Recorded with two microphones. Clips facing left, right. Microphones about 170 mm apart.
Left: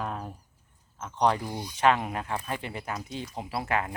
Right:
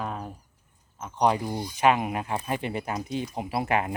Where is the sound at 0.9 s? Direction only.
10° right (ahead or behind).